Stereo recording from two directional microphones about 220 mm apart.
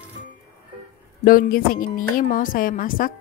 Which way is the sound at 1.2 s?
40° left (ahead or behind).